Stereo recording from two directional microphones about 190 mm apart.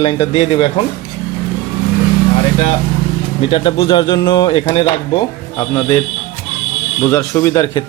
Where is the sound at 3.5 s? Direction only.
30° left (ahead or behind).